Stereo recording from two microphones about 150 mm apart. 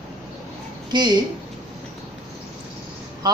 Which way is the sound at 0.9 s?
30° right (ahead or behind).